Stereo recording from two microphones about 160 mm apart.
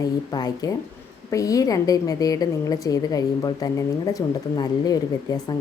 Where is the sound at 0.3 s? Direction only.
25° left (ahead or behind).